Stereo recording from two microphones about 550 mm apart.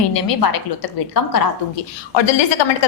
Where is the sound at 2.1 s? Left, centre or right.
Left.